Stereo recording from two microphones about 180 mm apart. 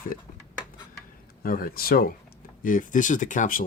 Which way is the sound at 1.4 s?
55° left (ahead or behind).